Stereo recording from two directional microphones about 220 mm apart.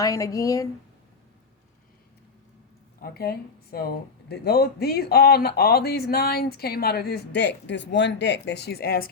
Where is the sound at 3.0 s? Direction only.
45° left (ahead or behind).